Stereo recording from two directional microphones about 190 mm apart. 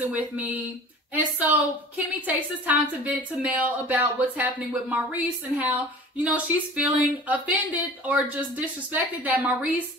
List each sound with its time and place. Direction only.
0.0 s a woman's voice: 10° right (ahead or behind)